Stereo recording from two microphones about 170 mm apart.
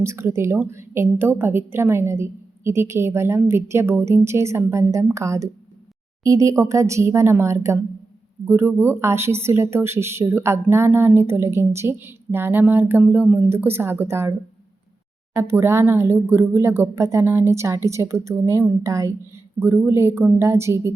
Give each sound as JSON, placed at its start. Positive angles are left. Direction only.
{"t": 0.0, "sound": "speech", "side_deg": -15}
{"t": 15.4, "sound": "speech", "side_deg": -15}